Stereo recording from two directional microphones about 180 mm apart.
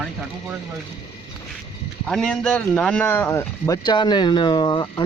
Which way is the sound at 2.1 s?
5° left (ahead or behind).